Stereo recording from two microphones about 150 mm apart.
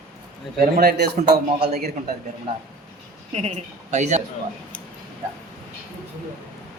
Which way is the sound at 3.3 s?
45° right (ahead or behind).